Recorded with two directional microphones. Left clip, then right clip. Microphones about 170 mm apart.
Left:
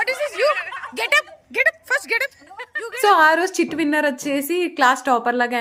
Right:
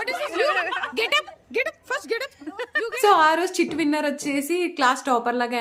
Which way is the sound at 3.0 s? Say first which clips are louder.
Left 3 dB; 20° left (ahead or behind).